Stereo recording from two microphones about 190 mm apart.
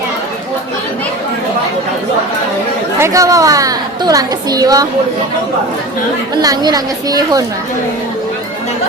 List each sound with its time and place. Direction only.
3.0 s a woman's voice: 15° right (ahead or behind)
6.4 s a woman's voice: 20° right (ahead or behind)